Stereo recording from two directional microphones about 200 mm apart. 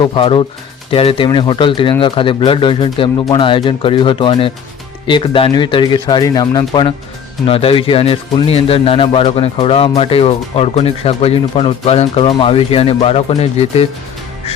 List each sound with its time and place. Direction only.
0.0 s speech: 25° left (ahead or behind)